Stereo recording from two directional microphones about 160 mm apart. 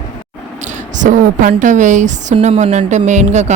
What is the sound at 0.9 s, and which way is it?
A woman's voice, 50° right (ahead or behind).